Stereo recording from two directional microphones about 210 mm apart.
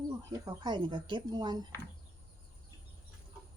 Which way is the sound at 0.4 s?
20° right (ahead or behind).